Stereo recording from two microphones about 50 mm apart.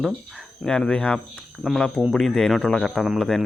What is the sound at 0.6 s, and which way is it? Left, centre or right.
Speech, centre.